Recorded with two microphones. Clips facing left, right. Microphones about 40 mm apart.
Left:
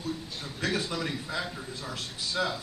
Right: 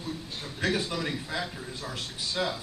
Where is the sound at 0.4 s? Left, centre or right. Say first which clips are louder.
Right 3 dB; centre.